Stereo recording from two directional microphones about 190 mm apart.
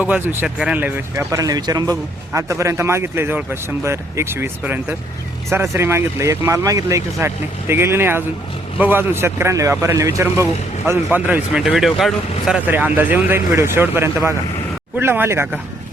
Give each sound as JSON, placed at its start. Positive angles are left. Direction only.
{"t": 0.0, "sound": "speech", "side_deg": -10}